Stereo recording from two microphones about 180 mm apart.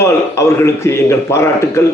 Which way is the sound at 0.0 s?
15° left (ahead or behind).